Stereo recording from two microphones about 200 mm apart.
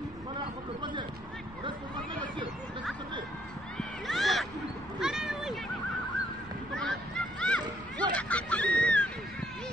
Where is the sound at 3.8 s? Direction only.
Centre (ahead or behind).